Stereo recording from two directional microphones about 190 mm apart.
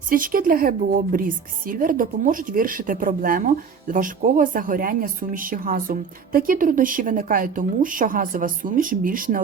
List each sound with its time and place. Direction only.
0.1 s speech: 45° right (ahead or behind)